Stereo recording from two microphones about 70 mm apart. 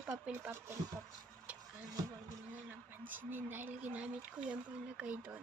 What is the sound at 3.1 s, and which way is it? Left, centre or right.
Speech, right.